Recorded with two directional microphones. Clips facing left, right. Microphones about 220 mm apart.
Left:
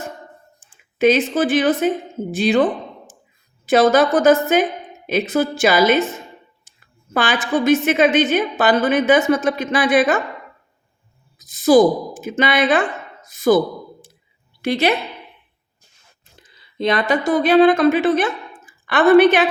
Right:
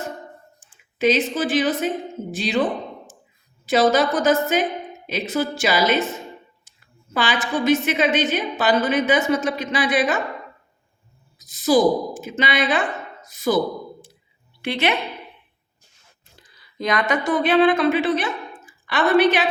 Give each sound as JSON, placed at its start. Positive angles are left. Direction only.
{"t": 0.6, "sound": "a sound", "side_deg": 55}
{"t": 0.9, "sound": "a woman's voice", "side_deg": 55}
{"t": 3.7, "sound": "a woman's voice", "side_deg": 55}
{"t": 11.3, "sound": "a woman's voice", "side_deg": 50}
{"t": 14.6, "sound": "a woman's voice", "side_deg": 40}
{"t": 16.3, "sound": "speech", "side_deg": 20}